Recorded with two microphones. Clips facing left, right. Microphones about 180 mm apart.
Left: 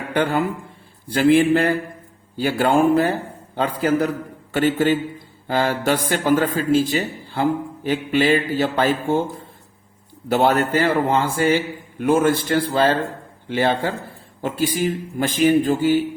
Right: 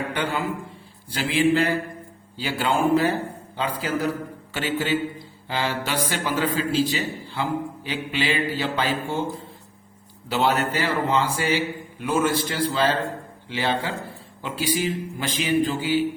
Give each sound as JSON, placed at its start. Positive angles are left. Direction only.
{"t": 0.1, "sound": "a man's voice", "side_deg": 50}
{"t": 10.2, "sound": "a man's voice", "side_deg": 50}